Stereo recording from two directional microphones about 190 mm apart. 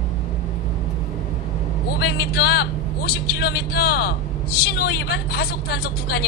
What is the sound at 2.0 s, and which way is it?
A woman's voice, 60° left (ahead or behind).